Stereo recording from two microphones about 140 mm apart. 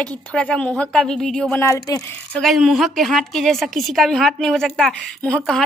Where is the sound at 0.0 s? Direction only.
10° left (ahead or behind).